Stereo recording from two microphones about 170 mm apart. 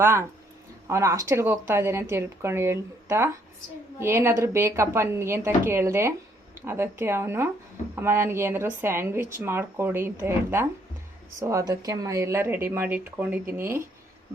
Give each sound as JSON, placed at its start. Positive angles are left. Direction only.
{"t": 0.0, "sound": "speech", "side_deg": -15}